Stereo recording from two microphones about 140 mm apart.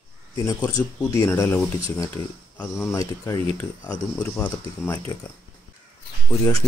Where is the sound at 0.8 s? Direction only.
15° left (ahead or behind).